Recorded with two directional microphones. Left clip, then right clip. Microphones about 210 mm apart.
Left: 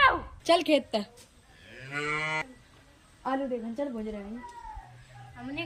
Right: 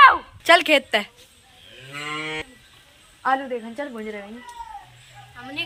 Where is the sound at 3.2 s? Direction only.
30° right (ahead or behind).